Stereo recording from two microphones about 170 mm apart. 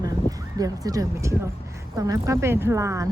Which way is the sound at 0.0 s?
20° right (ahead or behind).